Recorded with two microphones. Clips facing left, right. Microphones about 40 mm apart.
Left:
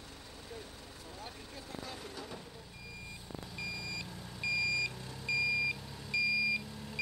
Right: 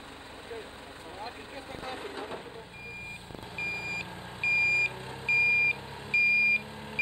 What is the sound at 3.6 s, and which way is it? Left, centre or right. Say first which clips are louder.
Vehicle: right 8 dB; right.